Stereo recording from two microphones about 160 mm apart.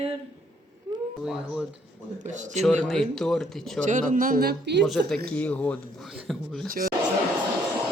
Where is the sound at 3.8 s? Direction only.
55° right (ahead or behind); by 4.8 s 80° right.